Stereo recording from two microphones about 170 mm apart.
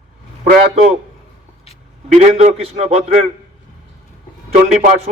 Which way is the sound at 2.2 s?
40° right (ahead or behind).